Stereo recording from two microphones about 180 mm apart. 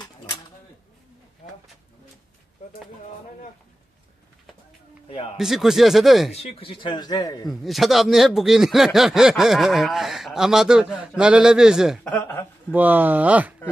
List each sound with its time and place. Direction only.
5.1 s a man's voice: 30° left (ahead or behind)
5.4 s speech: centre (ahead or behind)
6.3 s speech: 35° left (ahead or behind)
7.4 s speech: centre (ahead or behind)
12.2 s speech: 10° left (ahead or behind)
12.7 s speech: 10° right (ahead or behind)